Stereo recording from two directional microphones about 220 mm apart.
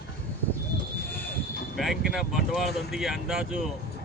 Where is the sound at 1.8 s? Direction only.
Centre (ahead or behind).